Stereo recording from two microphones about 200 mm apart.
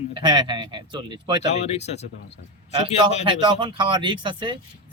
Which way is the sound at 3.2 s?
25° right (ahead or behind).